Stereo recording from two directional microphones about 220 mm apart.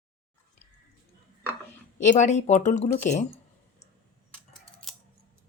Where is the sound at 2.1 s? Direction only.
30° left (ahead or behind).